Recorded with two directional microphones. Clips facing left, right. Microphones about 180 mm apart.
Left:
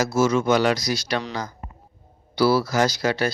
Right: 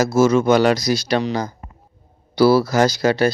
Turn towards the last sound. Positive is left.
turn(degrees=-40)  # may be behind; listen again after turning